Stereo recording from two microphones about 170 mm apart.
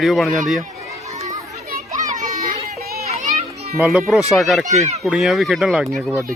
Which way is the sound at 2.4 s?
60° right (ahead or behind).